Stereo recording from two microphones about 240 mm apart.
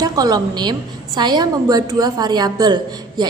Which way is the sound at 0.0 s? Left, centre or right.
Centre.